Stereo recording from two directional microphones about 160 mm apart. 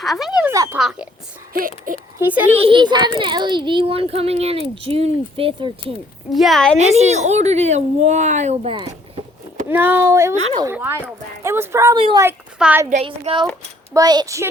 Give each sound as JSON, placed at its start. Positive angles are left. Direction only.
{"t": 0.0, "sound": "speech", "side_deg": 0}
{"t": 0.5, "sound": "speech", "side_deg": -20}
{"t": 0.8, "sound": "speech", "side_deg": 0}
{"t": 1.5, "sound": "a sound", "side_deg": -60}
{"t": 2.1, "sound": "speech", "side_deg": -10}
{"t": 2.6, "sound": "a child's voice", "side_deg": -30}
{"t": 6.3, "sound": "speech", "side_deg": 0}
{"t": 6.7, "sound": "speech", "side_deg": -45}
{"t": 9.6, "sound": "speech", "side_deg": -15}
{"t": 11.9, "sound": "a child's voice", "side_deg": -35}
{"t": 12.5, "sound": "a woman's voice", "side_deg": -5}
{"t": 12.9, "sound": "a child's voice", "side_deg": -40}